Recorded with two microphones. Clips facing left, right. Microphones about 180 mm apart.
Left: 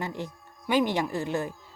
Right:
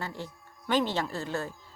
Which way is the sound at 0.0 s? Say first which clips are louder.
Left 4 dB; 20° left (ahead or behind).